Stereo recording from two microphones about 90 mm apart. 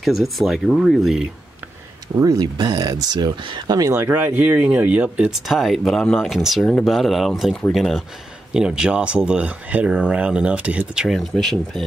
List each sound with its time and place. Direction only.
0.0 s speech: centre (ahead or behind)
2.1 s speech: 45° right (ahead or behind)
3.9 s speech: 25° right (ahead or behind)
11.1 s speech: 5° left (ahead or behind)